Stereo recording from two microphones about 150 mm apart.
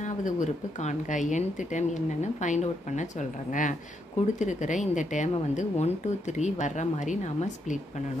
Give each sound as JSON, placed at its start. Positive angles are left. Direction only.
{"t": 0.0, "sound": "a woman's voice", "side_deg": 55}